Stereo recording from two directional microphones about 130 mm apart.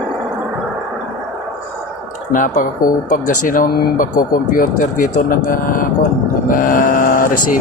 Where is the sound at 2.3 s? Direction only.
90° left.